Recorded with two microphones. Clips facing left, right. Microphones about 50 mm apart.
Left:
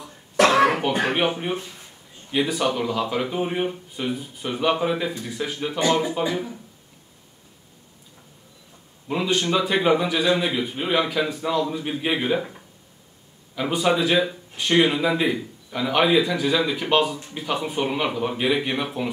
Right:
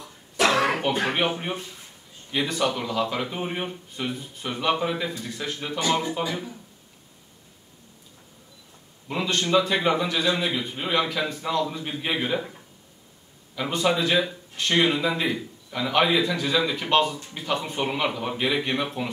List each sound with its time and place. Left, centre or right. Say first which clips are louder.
0.4 s cough: left 5 dB; left
1.1 s speech: left 3 dB; centre
9.0 s speech: left 3 dB; centre
13.6 s speech: left 2 dB; centre